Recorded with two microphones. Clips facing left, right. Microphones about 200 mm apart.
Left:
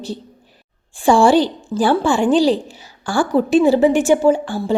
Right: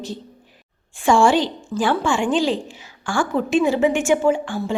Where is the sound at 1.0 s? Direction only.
35° left (ahead or behind).